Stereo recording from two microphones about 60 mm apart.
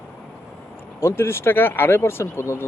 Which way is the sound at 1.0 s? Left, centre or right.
Left.